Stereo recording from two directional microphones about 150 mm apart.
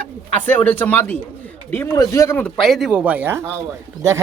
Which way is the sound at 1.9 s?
25° left (ahead or behind).